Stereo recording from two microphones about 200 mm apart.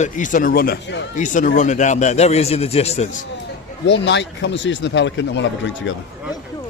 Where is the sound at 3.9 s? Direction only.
60° left (ahead or behind).